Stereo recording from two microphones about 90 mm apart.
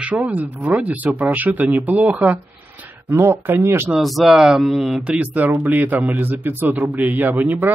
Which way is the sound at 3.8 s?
Centre (ahead or behind).